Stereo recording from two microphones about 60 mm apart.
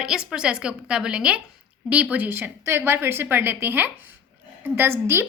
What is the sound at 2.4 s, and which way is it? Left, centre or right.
A woman's voice, right.